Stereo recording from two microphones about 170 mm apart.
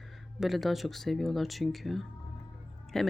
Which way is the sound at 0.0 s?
Centre (ahead or behind).